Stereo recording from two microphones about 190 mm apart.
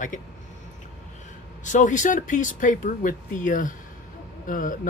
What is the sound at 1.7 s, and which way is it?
Speech, 40° left (ahead or behind).